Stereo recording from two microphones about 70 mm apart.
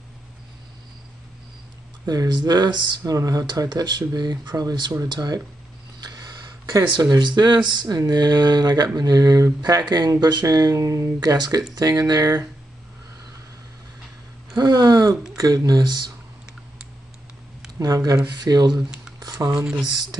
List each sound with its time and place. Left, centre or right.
2.0 s speech: right
3.0 s speech: right
10.4 s speech: right
11.1 s speech: right
11.7 s speech: right
14.6 s speech: right
15.3 s speech: right
17.7 s speech: right
18.2 s speech: right
18.7 s speech: centre
19.1 s speech: right